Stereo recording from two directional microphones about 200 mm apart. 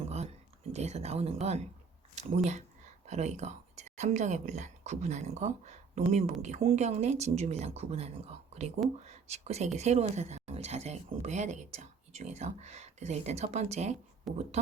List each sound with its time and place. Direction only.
0.0 s a sound: 35° right (ahead or behind)
0.7 s speech: 35° right (ahead or behind)
14.3 s speech: centre (ahead or behind)